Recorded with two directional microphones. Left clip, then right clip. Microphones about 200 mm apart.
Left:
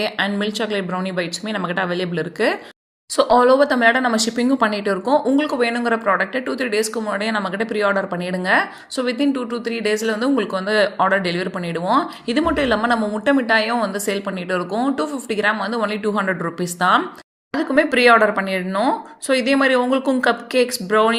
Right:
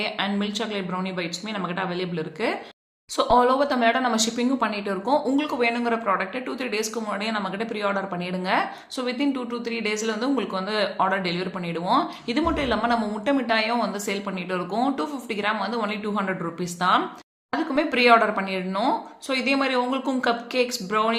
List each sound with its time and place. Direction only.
0.0 s speech: 30° left (ahead or behind)